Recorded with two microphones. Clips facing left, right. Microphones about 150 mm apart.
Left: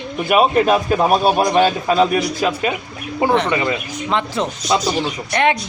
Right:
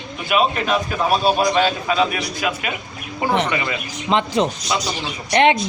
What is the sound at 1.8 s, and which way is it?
Speech, 40° left (ahead or behind).